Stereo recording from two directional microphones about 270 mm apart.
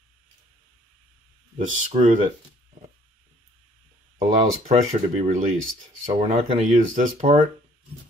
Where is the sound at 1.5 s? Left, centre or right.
Right.